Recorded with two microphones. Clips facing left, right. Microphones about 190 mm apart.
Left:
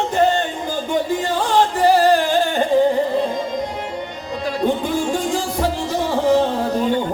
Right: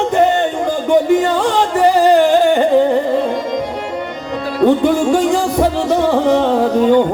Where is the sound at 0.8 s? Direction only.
70° right (ahead or behind).